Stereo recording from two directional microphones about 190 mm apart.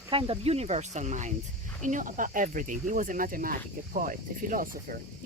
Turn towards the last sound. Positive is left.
turn(degrees=-45)  # may be behind; listen again after turning